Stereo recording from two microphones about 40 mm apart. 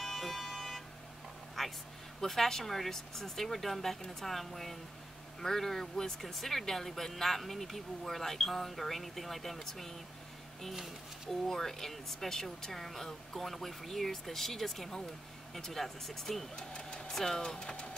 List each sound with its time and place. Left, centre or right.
0.0 s vehicle: centre
2.2 s speech: centre
11.4 s speech: centre
16.5 s speech: left
17.1 s speech: centre